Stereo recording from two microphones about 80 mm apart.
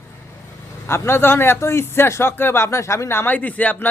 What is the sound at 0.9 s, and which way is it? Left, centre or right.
A man's voice, left.